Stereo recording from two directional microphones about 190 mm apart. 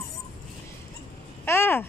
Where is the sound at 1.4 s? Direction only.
10° left (ahead or behind).